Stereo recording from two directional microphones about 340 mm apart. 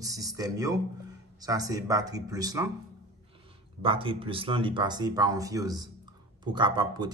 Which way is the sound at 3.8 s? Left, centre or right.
Centre.